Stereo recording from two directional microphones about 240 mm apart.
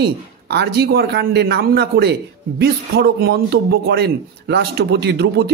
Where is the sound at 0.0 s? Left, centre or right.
Right.